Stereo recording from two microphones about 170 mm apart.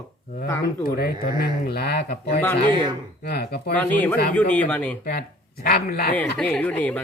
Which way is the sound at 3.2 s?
70° left (ahead or behind).